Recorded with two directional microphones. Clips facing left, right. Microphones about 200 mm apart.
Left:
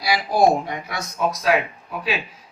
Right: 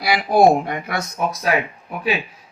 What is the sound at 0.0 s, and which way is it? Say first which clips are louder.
Speech: right 3 dB; 55° right (ahead or behind).